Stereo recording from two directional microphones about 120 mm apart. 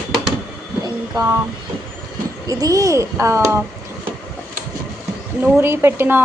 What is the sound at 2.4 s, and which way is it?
A child's voice, 30° right (ahead or behind).